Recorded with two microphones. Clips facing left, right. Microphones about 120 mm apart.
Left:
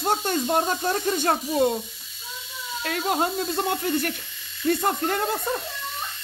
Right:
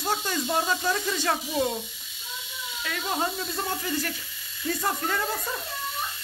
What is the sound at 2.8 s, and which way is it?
Speech, 50° left (ahead or behind).